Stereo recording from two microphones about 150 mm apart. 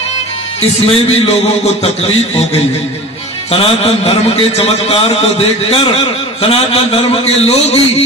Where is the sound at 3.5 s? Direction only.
40° left (ahead or behind).